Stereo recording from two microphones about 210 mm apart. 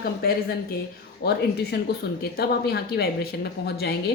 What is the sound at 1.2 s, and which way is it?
A woman's voice, 50° left (ahead or behind).